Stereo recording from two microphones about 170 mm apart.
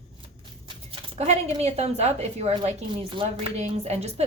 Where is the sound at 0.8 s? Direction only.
35° right (ahead or behind).